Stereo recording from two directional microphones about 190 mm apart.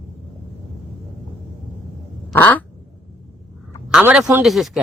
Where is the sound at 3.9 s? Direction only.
5° right (ahead or behind).